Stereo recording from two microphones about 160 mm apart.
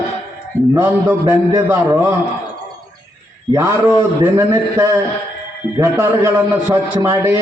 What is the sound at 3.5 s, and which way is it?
A man's voice, 20° right (ahead or behind).